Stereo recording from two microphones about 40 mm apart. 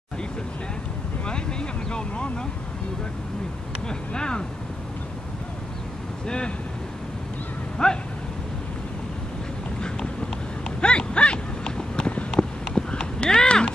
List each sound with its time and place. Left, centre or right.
1.2 s vehicle: left
4.1 s speech: left
6.2 s speech: left
7.7 s speech: left
9.8 s a sound: left
12.3 s clip-clop: centre